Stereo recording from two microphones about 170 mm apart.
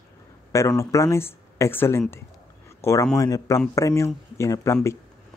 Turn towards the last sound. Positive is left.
turn(degrees=15)  # may be behind; listen again after turning